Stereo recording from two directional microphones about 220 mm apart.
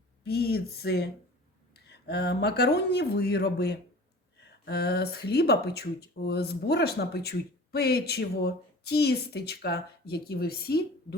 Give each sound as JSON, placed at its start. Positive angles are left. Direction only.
{"t": 0.3, "sound": "speech", "side_deg": 45}